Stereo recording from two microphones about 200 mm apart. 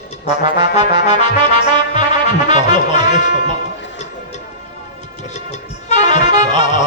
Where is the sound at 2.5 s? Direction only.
35° left (ahead or behind).